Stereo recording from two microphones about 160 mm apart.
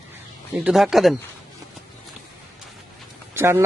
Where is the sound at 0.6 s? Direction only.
Centre (ahead or behind).